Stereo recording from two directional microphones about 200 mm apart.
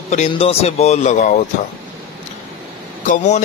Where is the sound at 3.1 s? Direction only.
35° left (ahead or behind).